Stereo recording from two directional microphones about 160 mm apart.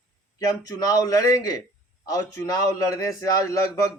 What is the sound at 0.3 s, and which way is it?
A man's voice, 20° left (ahead or behind).